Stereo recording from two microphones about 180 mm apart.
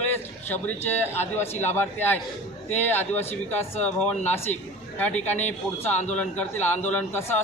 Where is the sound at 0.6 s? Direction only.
10° left (ahead or behind).